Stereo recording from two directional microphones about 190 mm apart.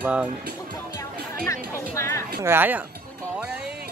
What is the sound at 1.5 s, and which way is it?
Speech, 15° left (ahead or behind).